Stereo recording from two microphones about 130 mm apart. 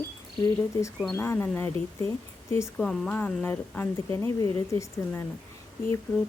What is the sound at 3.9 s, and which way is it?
Speech, 25° left (ahead or behind).